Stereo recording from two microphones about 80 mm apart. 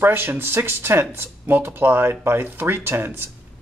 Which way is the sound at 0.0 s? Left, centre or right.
Right.